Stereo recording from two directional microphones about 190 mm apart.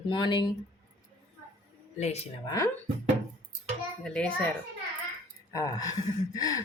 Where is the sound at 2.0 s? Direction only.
35° left (ahead or behind).